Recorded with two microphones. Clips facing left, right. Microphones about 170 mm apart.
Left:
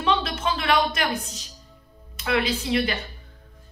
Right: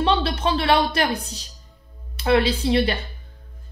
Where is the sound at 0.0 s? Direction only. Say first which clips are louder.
Right 3 dB; 35° right (ahead or behind).